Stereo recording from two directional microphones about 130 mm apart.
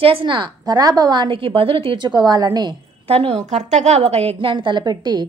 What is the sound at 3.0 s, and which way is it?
A woman's voice, 50° right (ahead or behind).